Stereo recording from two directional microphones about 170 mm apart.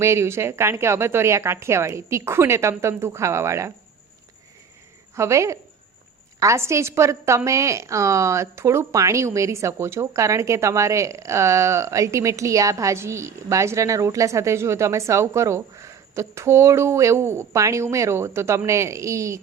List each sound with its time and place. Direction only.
0.0 s a woman's voice: 15° right (ahead or behind)
5.1 s a woman's voice: 15° right (ahead or behind)